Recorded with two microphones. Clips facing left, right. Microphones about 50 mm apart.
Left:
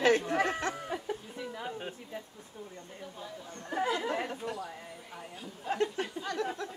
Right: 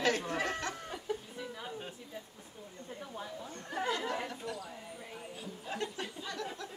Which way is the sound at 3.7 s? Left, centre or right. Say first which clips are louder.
Left 4 dB; centre.